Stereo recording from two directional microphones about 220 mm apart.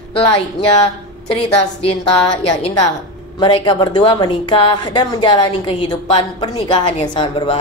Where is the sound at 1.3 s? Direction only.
25° left (ahead or behind).